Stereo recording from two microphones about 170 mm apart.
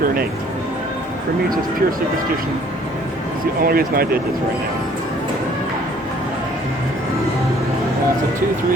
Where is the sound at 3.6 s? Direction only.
60° right (ahead or behind).